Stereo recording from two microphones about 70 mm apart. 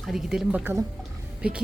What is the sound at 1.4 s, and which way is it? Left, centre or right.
Speech, centre.